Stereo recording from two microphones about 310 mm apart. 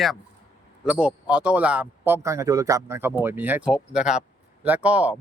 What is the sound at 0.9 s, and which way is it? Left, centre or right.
Speech, centre.